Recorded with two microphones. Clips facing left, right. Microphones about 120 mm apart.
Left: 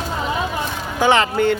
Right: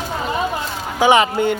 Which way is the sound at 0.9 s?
15° right (ahead or behind).